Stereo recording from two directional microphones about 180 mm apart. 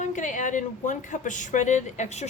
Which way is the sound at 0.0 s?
40° left (ahead or behind).